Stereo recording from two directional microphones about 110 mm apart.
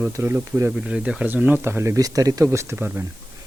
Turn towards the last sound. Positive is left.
turn(degrees=-20)  # may be behind; listen again after turning